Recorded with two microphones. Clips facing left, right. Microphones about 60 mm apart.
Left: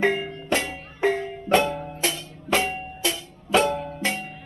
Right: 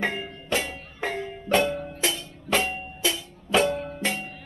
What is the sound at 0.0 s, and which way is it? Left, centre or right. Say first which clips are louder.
Music: left 6 dB; centre.